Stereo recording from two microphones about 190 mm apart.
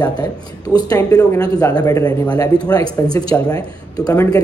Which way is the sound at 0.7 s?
20° left (ahead or behind).